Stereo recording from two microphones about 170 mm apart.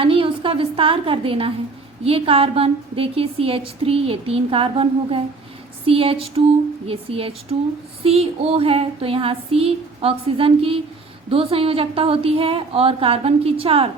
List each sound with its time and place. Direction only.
0.0 s a woman's voice: 30° right (ahead or behind)